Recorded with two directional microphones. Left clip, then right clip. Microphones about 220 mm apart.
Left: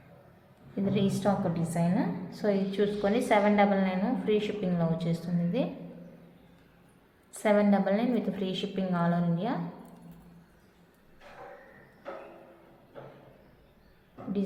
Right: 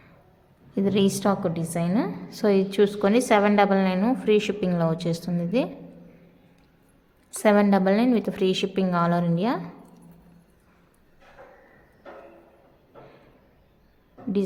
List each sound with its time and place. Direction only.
0.8 s a woman's voice: 45° right (ahead or behind)
7.3 s a woman's voice: 45° right (ahead or behind)